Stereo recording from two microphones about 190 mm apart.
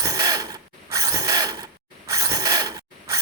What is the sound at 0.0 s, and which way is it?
Mechanisms, 20° right (ahead or behind).